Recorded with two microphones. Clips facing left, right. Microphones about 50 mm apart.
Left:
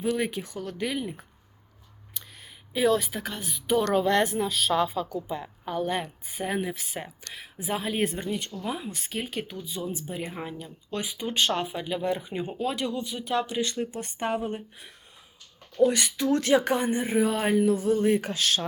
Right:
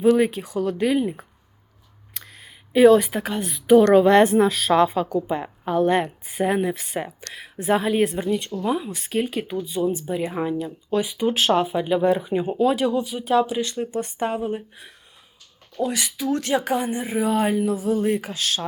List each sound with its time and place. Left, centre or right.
0.0 s speech: centre
0.9 s speech: centre
2.2 s a woman's voice: centre